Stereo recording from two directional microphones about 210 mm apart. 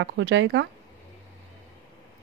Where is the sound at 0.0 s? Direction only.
60° right (ahead or behind).